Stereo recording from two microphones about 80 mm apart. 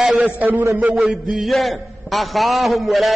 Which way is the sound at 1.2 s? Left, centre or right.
Centre.